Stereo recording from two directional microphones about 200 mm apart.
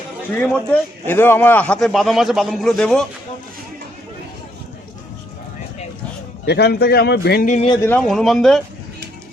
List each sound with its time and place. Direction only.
0.4 s a man's voice: 5° left (ahead or behind)
6.4 s speech: 55° left (ahead or behind)
7.4 s speech: 35° left (ahead or behind)
7.7 s a man's voice: 10° left (ahead or behind)